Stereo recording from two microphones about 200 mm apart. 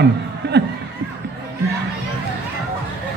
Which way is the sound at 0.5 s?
55° right (ahead or behind).